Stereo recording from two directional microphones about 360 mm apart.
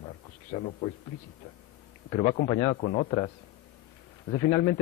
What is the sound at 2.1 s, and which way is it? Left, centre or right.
A man's voice, centre.